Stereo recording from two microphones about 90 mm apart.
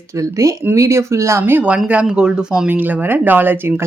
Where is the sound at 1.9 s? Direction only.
10° right (ahead or behind).